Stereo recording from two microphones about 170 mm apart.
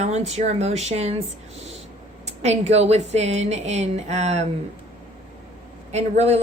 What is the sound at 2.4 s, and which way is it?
A woman's voice, 40° right (ahead or behind).